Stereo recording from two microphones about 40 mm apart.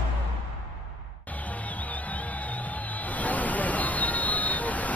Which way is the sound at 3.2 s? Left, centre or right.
Left.